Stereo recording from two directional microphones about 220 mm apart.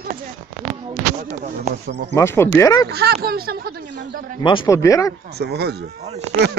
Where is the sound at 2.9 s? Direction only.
45° right (ahead or behind).